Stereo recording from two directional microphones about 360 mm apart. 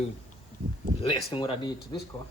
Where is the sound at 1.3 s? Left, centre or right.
Centre.